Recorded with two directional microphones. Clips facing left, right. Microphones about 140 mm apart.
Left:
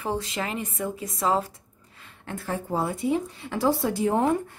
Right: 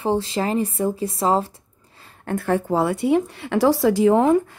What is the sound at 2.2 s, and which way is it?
Speech, 60° right (ahead or behind).